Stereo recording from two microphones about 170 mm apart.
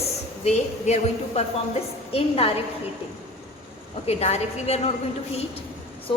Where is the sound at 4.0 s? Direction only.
40° left (ahead or behind).